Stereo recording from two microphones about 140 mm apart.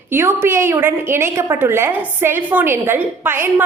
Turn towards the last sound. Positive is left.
turn(degrees=-15)  # may be behind; listen again after turning